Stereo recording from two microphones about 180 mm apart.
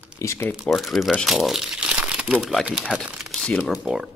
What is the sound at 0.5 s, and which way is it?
Speech, centre (ahead or behind).